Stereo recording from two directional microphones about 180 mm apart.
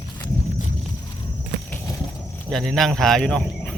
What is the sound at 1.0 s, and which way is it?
Walk, 25° left (ahead or behind).